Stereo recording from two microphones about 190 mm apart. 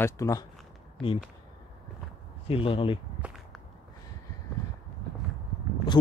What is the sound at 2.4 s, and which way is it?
Speech, 30° left (ahead or behind).